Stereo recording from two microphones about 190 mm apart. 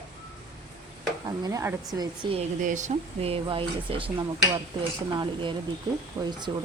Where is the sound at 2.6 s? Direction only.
40° right (ahead or behind); by 6.5 s 25° right (ahead or behind).